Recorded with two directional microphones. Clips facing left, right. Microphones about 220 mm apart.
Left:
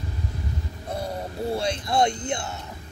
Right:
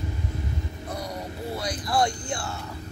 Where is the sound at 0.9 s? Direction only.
25° left (ahead or behind).